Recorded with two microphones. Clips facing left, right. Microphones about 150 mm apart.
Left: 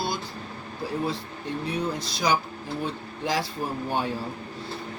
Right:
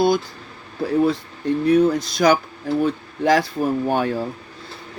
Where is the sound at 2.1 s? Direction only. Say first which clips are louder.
Right 8 dB; 75° right (ahead or behind).